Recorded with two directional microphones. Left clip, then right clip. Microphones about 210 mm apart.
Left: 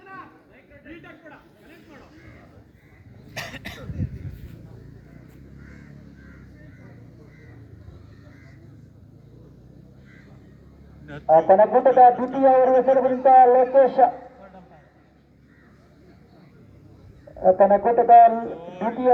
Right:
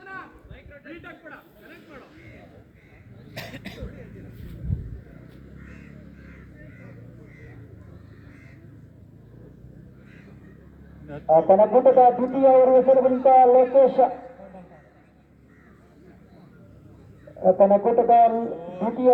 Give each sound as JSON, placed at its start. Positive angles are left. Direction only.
{"t": 0.0, "sound": "a sound", "side_deg": 55}
{"t": 3.3, "sound": "cough", "side_deg": 25}
{"t": 11.1, "sound": "speech", "side_deg": 20}
{"t": 17.4, "sound": "speech", "side_deg": 25}